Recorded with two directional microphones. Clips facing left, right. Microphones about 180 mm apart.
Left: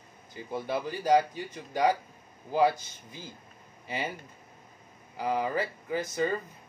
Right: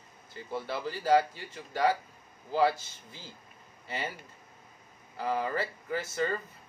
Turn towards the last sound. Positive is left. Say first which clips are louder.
# left 2 dB
turn(degrees=15)  # may be behind; listen again after turning